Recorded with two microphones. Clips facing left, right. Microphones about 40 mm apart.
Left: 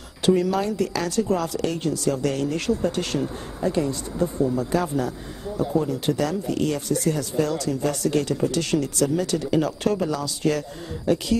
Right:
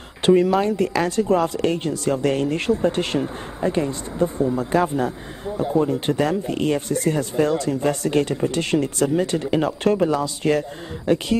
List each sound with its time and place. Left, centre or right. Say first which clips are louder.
0.2 s speech: right 4 dB; right